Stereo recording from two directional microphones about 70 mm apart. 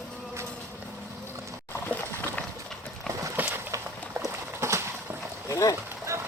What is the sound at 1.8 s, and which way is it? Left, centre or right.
Boat, left.